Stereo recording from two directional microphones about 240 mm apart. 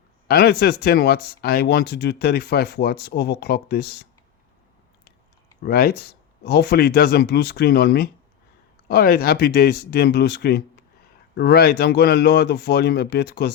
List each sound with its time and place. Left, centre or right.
0.3 s speech: left
5.6 s speech: left